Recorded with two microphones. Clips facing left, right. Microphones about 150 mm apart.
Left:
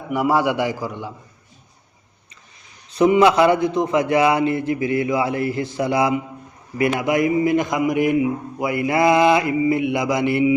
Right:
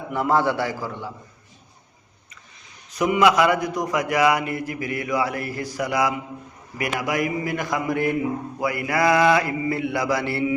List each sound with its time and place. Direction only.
0.1 s a man's voice: 10° left (ahead or behind)
2.9 s a man's voice: 30° left (ahead or behind)